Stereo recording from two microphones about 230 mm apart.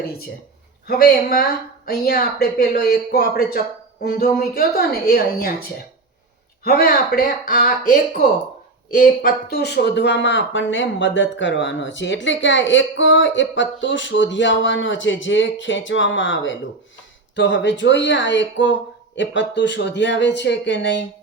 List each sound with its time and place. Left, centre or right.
0.9 s a woman's voice: left
6.7 s a woman's voice: left